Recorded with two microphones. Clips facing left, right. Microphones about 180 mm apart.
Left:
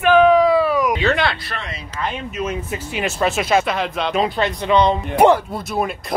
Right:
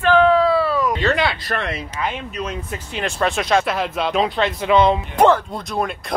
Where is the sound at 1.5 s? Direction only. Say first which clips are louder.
Right 6 dB; 60° right (ahead or behind).